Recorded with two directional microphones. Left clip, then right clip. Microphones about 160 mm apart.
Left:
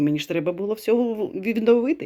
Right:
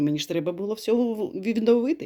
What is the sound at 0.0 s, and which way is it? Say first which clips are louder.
Speech: left 3 dB; centre (ahead or behind).